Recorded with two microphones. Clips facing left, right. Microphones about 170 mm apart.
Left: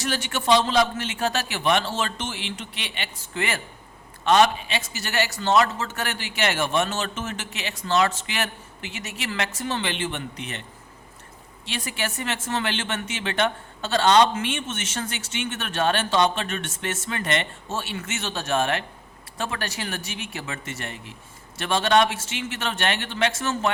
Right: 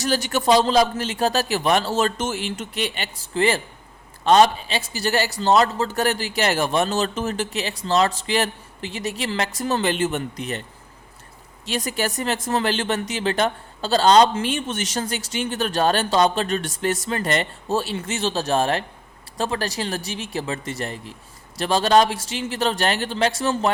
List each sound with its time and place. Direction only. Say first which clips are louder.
0.0 s speech: right 5 dB; 40° right (ahead or behind)
11.6 s speech: right 6 dB; 40° right (ahead or behind)